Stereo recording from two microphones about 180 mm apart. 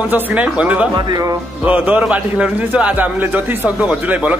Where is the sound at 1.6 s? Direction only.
10° right (ahead or behind).